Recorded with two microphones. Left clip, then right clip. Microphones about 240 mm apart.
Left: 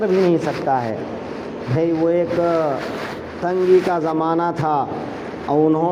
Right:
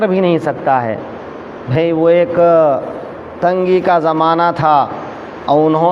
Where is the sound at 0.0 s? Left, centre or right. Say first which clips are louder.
Right 4 dB; right.